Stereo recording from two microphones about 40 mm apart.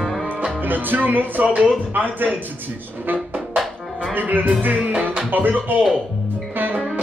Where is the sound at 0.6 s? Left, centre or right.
Right.